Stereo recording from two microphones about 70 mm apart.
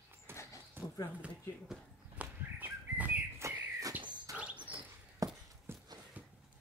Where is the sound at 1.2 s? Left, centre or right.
Centre.